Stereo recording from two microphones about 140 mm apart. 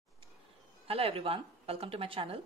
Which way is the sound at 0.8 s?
45° right (ahead or behind).